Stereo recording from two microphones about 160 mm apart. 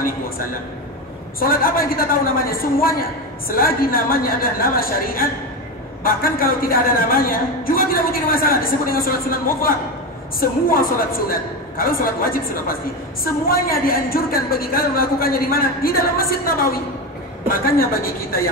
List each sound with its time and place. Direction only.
1.4 s a woman's voice: 65° left (ahead or behind)